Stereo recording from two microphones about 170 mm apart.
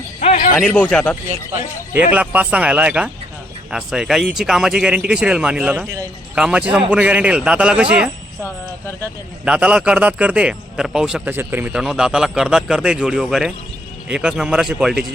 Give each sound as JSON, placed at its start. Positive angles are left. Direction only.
{"t": 0.2, "sound": "a sound", "side_deg": 45}
{"t": 0.5, "sound": "speech", "side_deg": 5}
{"t": 1.9, "sound": "speech", "side_deg": -10}
{"t": 9.4, "sound": "speech", "side_deg": -5}